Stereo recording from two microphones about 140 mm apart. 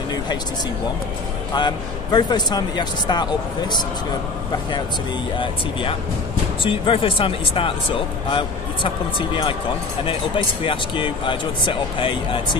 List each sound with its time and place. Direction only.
1.5 s speech: 30° left (ahead or behind)
5.4 s speech: 40° left (ahead or behind)